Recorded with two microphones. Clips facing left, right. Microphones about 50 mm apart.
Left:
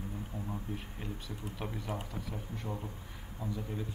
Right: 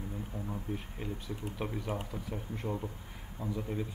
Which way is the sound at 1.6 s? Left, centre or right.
Centre.